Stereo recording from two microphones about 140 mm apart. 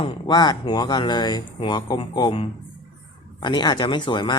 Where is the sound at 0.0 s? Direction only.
35° left (ahead or behind).